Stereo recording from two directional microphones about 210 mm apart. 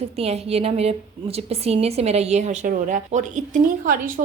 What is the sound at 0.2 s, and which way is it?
A woman's voice, 30° right (ahead or behind).